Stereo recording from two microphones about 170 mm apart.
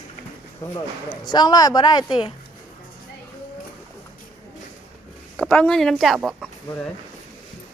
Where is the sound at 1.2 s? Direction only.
25° left (ahead or behind).